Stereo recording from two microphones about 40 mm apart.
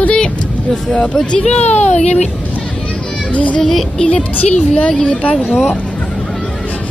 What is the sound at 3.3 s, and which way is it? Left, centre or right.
Speech, left.